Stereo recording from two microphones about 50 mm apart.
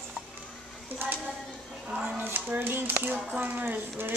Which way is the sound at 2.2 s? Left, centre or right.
Right.